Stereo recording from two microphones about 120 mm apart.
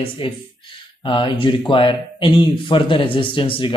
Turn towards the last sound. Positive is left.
turn(degrees=45)  # may be behind; listen again after turning